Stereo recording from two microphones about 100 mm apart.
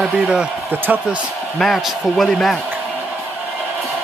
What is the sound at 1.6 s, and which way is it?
Speech, centre (ahead or behind).